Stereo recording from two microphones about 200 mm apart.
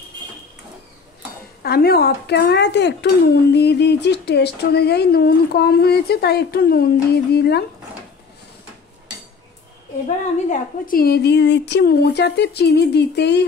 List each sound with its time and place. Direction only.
1.6 s a woman's voice: 50° left (ahead or behind)
10.0 s a woman's voice: 40° left (ahead or behind)